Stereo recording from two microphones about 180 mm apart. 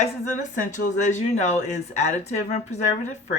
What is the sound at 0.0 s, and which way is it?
Speech, 40° left (ahead or behind).